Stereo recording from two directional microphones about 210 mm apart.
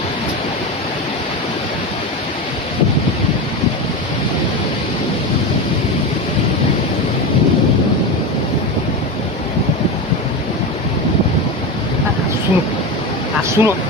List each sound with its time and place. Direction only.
13.6 s speech: 10° right (ahead or behind)